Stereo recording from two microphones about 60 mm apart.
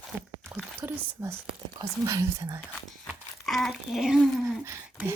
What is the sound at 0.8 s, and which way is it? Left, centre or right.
Speech, right.